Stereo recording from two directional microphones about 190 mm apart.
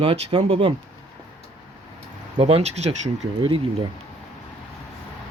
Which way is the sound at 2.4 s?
35° right (ahead or behind).